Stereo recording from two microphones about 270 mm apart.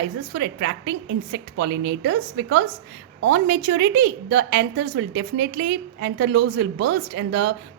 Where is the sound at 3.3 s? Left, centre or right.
Right.